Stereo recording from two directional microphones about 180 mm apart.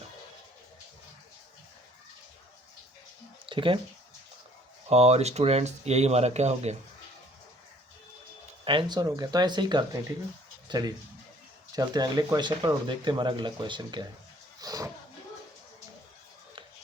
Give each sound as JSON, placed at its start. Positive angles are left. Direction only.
{"t": 3.4, "sound": "a sound", "side_deg": -30}
{"t": 4.9, "sound": "speech", "side_deg": -35}
{"t": 8.6, "sound": "speech", "side_deg": -25}